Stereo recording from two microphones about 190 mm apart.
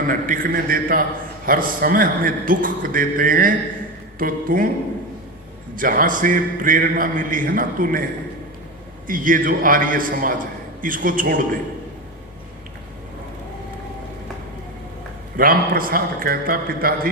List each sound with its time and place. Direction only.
0.1 s a man's voice: 45° right (ahead or behind)
5.7 s a man's voice: 45° right (ahead or behind)
9.0 s a man's voice: 45° right (ahead or behind)
15.4 s a man's voice: 50° right (ahead or behind)